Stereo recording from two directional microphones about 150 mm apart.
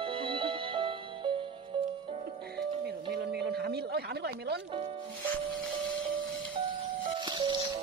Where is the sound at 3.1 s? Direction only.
90° right.